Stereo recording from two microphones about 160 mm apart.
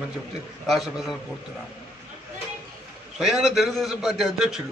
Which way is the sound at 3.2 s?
Centre (ahead or behind).